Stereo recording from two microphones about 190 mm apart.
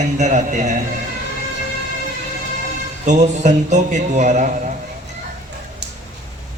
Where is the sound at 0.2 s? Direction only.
40° right (ahead or behind).